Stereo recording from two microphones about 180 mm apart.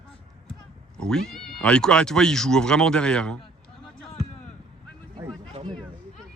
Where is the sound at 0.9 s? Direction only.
5° left (ahead or behind).